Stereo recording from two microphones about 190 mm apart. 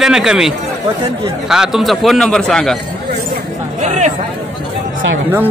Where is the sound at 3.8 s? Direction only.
35° right (ahead or behind).